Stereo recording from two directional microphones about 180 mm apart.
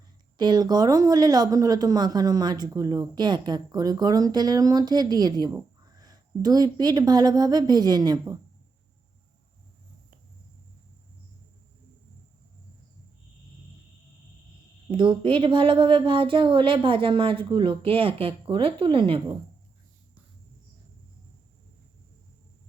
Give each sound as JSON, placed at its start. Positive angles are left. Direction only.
{"t": 0.3, "sound": "speech", "side_deg": -25}
{"t": 14.8, "sound": "speech", "side_deg": -25}